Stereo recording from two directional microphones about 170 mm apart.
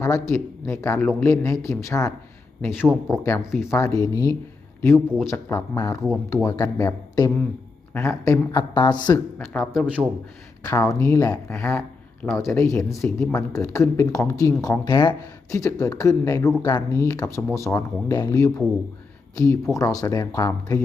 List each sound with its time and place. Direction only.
0.0 s speech: 20° left (ahead or behind)
3.7 s speech: 20° left (ahead or behind)
4.9 s speech: 5° right (ahead or behind)
5.3 s speech: 15° left (ahead or behind)
9.5 s speech: centre (ahead or behind)
10.6 s speech: 20° left (ahead or behind); by 12.5 s centre (ahead or behind)
12.5 s speech: 15° left (ahead or behind)
19.7 s speech: 20° left (ahead or behind)